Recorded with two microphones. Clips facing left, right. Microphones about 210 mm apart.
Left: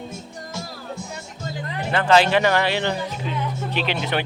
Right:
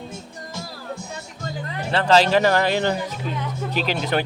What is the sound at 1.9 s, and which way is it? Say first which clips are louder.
Speech: even; 35° right (ahead or behind).